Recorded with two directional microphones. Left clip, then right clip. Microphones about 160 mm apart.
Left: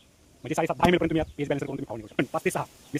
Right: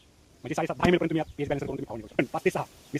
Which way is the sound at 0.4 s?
30° left (ahead or behind).